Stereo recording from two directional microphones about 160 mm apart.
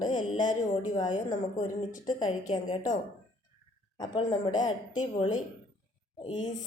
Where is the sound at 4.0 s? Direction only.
25° left (ahead or behind).